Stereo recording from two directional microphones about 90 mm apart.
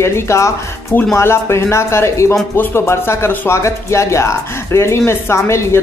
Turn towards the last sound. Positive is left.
turn(degrees=25)  # may be behind; listen again after turning